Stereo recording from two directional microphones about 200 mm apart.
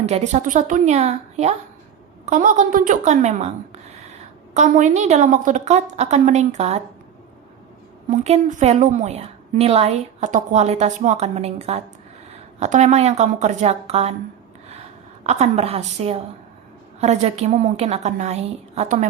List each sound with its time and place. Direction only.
0.0 s a woman's voice: 35° right (ahead or behind)
8.1 s a woman's voice: 35° right (ahead or behind)
15.2 s a woman's voice: 35° right (ahead or behind)